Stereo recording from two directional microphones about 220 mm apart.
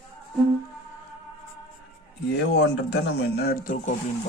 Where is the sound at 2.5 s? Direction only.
50° left (ahead or behind).